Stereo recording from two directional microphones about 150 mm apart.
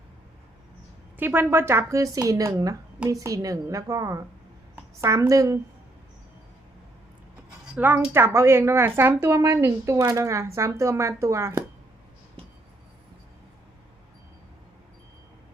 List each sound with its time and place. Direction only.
1.2 s a woman's voice: 15° right (ahead or behind)
7.8 s a woman's voice: 15° right (ahead or behind)